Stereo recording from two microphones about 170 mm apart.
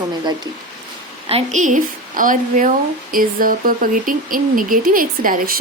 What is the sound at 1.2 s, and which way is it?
A woman's voice, 40° right (ahead or behind).